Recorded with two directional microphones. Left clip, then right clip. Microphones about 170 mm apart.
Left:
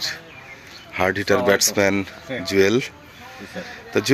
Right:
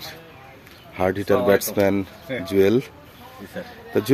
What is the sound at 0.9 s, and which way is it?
Speech, 10° right (ahead or behind).